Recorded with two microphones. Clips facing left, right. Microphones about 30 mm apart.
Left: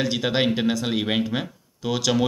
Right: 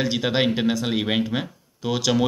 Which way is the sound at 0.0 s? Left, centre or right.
Centre.